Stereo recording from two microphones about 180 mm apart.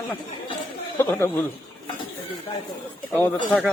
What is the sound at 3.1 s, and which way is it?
Speech, 10° left (ahead or behind).